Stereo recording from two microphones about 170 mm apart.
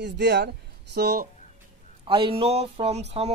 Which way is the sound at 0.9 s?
65° right (ahead or behind).